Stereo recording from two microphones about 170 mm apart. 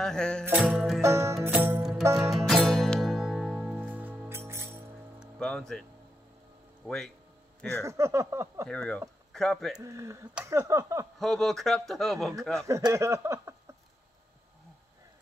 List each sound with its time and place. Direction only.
0.0 s speech: 5° left (ahead or behind)
0.5 s speech: 10° right (ahead or behind)
1.0 s music: 15° right (ahead or behind)
2.3 s music: centre (ahead or behind); by 4.6 s 15° right (ahead or behind)
5.2 s music: 5° left (ahead or behind)
6.8 s speech: 5° right (ahead or behind)
7.8 s speech: 15° right (ahead or behind)
8.6 s a man's voice: 5° left (ahead or behind)
9.8 s speech: 15° right (ahead or behind)
11.1 s speech: centre (ahead or behind)
12.5 s speech: 15° right (ahead or behind)